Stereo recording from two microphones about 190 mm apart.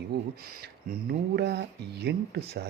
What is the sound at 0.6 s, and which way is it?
Speech, 55° right (ahead or behind).